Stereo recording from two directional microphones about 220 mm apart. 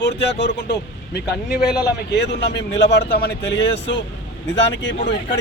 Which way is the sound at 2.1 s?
50° left (ahead or behind).